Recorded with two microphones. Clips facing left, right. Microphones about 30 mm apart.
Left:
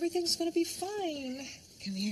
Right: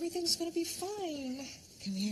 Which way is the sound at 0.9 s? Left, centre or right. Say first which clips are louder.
Left 2 dB; left.